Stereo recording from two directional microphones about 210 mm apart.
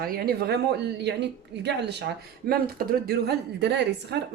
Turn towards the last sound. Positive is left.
turn(degrees=-55)  # may be behind; listen again after turning